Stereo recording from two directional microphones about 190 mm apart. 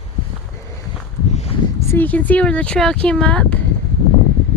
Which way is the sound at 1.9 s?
10° left (ahead or behind).